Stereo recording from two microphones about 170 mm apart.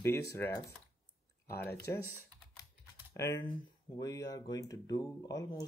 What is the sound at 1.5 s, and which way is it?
Speech, 15° left (ahead or behind).